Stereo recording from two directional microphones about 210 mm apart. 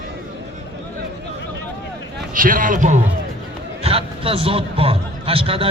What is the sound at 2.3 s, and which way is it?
A man's voice, 40° right (ahead or behind).